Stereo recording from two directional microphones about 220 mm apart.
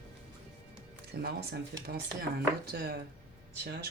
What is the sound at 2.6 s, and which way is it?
Speech, 45° right (ahead or behind).